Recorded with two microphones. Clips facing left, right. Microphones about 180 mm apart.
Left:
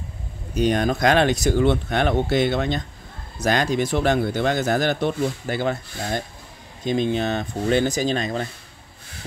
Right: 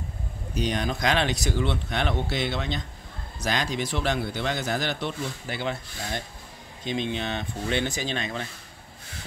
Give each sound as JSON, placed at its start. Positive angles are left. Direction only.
{"t": 0.6, "sound": "speech", "side_deg": 50}